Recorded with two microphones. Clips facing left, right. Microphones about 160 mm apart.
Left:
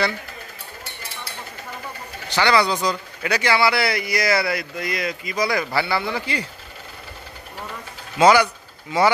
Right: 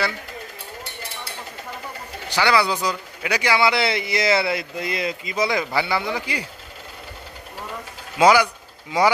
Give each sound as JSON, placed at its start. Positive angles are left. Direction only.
{"t": 2.2, "sound": "speech", "side_deg": -10}
{"t": 8.2, "sound": "speech", "side_deg": -10}